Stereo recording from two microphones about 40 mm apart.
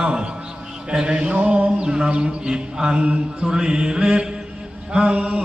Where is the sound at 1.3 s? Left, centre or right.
Right.